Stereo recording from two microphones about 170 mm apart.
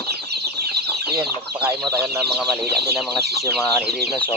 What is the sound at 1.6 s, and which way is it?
Speech, 15° right (ahead or behind).